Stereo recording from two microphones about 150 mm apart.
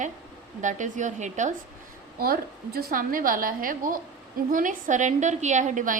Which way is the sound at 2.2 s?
85° right.